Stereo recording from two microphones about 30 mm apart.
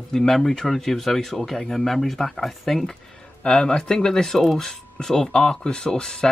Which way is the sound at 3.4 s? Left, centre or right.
Left.